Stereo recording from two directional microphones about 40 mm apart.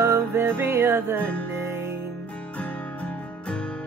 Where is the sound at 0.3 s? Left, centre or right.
Right.